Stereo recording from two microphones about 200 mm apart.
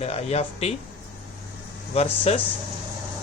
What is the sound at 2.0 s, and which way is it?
Speech, 30° left (ahead or behind).